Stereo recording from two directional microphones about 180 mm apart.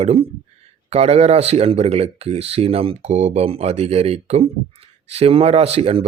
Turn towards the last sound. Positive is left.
turn(degrees=-35)  # may be behind; listen again after turning